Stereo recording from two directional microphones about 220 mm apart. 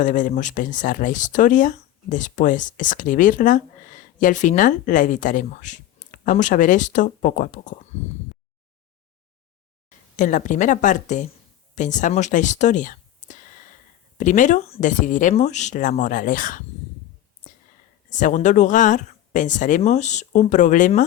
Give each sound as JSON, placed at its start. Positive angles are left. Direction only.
{"t": 0.0, "sound": "speech", "side_deg": 35}
{"t": 10.2, "sound": "speech", "side_deg": 35}
{"t": 18.1, "sound": "speech", "side_deg": 35}